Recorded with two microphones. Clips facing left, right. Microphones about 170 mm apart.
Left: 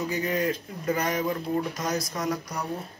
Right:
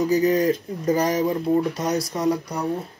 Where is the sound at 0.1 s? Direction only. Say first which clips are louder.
Right 8 dB; 35° right (ahead or behind).